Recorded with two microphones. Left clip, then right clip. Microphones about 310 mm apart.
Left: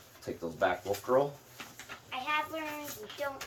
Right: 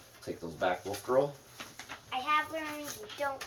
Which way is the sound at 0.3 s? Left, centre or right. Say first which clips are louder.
Even; centre.